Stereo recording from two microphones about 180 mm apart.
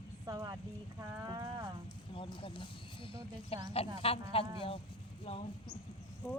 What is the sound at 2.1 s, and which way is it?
Speech, 30° left (ahead or behind).